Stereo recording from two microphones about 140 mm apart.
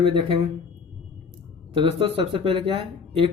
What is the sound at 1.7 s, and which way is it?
Speech, 40° right (ahead or behind).